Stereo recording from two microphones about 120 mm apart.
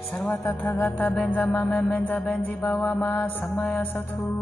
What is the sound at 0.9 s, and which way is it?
Music, 15° left (ahead or behind).